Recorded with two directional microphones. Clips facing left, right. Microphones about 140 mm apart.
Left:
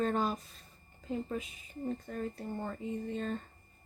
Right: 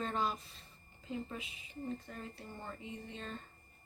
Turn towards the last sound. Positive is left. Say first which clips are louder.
# left 10 dB
turn(degrees=45)  # may be behind; listen again after turning